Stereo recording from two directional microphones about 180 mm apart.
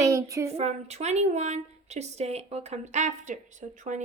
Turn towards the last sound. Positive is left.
turn(degrees=-45)  # may be behind; listen again after turning